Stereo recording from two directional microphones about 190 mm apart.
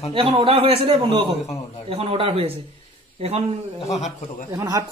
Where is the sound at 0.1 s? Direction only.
25° right (ahead or behind).